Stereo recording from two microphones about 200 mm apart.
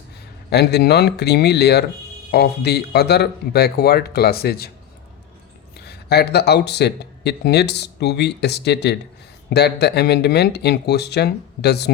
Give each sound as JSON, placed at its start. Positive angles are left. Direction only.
{"t": 0.5, "sound": "speech", "side_deg": 55}
{"t": 5.8, "sound": "speech", "side_deg": 55}